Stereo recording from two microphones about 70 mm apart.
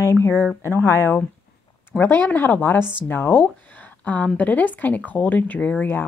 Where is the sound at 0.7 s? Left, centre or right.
Left.